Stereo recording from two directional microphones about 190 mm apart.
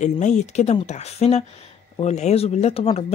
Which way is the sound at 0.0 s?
40° left (ahead or behind).